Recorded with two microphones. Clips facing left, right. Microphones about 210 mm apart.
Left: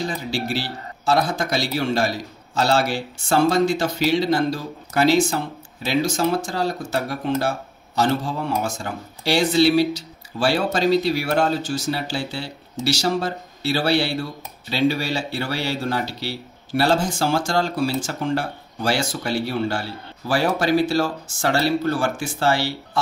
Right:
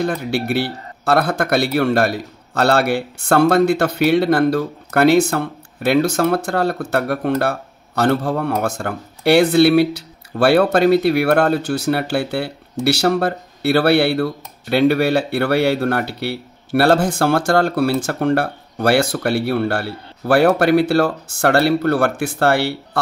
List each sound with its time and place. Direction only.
0.0 s a man's voice: 60° right (ahead or behind)